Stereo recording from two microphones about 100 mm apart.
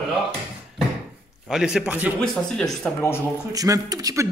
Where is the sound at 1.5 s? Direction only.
5° right (ahead or behind).